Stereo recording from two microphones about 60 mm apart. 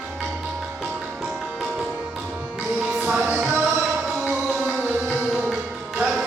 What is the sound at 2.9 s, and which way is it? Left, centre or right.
Music, right.